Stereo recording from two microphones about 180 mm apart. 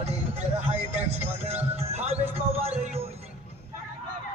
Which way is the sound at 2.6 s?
35° right (ahead or behind).